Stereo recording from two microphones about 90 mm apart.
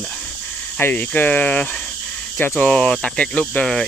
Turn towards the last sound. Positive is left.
turn(degrees=10)  # may be behind; listen again after turning